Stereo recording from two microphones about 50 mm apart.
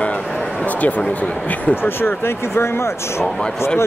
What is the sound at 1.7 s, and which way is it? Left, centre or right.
Speech, left.